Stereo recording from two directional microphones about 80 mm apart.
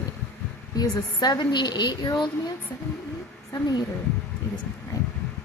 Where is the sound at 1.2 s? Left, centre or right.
Left.